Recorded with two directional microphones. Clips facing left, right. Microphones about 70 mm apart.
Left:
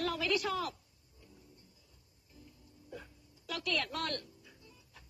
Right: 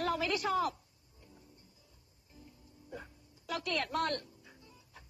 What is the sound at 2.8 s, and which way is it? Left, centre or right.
A woman's voice, right.